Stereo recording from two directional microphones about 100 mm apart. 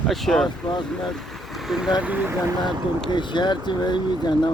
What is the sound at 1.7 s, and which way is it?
Speech, 5° right (ahead or behind).